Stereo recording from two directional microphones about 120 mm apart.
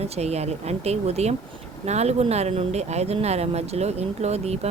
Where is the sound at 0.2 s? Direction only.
60° right (ahead or behind).